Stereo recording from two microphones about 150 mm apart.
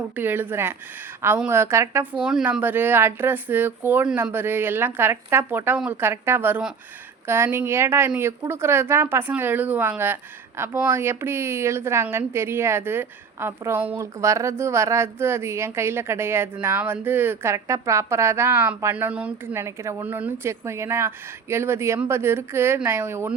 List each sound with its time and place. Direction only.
0.2 s a woman's voice: 15° right (ahead or behind)
2.2 s a woman's voice: 5° right (ahead or behind)